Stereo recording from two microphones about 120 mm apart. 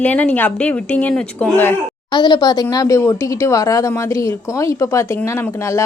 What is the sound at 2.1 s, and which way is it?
A woman's voice, 40° left (ahead or behind).